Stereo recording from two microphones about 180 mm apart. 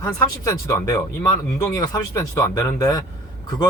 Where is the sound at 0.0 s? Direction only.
15° left (ahead or behind).